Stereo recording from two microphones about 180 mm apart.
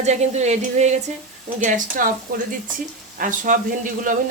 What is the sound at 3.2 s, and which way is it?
Speech, 45° right (ahead or behind).